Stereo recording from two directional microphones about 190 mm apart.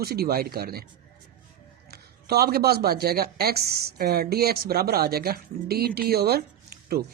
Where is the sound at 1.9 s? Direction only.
55° right (ahead or behind).